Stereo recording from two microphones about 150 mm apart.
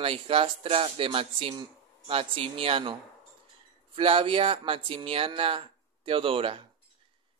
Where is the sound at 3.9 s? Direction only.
35° right (ahead or behind).